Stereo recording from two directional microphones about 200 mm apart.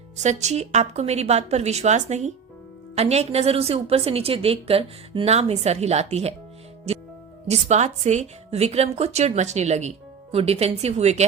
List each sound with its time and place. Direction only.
0.2 s a woman's voice: 35° right (ahead or behind)
6.9 s music: 30° right (ahead or behind)
7.4 s a woman's voice: 35° right (ahead or behind)